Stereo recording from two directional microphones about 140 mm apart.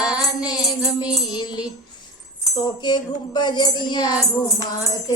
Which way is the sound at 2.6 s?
30° left (ahead or behind).